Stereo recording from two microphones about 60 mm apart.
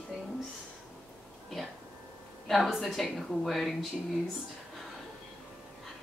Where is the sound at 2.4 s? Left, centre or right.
Centre.